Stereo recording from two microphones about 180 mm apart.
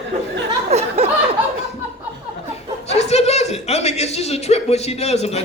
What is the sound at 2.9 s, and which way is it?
A man's voice, 35° left (ahead or behind).